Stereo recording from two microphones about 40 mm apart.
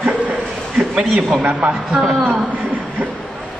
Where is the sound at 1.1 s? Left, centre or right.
Right.